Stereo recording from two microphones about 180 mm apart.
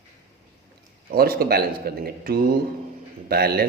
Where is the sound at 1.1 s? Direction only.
55° right (ahead or behind).